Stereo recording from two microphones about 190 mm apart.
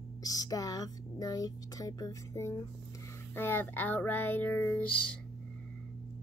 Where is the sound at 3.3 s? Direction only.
10° left (ahead or behind).